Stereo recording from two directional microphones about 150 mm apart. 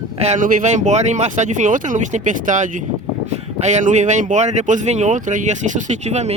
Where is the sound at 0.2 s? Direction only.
55° right (ahead or behind).